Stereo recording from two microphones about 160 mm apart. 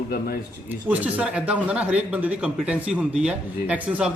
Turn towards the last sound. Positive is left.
turn(degrees=-10)  # may be behind; listen again after turning